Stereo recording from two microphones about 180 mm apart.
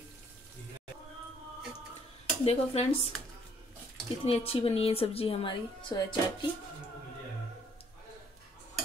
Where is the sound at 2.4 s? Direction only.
35° left (ahead or behind).